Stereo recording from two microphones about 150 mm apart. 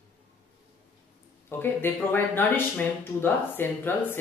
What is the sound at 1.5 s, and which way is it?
Speech, 15° left (ahead or behind).